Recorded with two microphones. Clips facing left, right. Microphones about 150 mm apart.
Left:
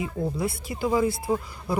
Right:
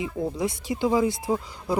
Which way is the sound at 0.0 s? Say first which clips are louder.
Right 1 dB; 15° right (ahead or behind).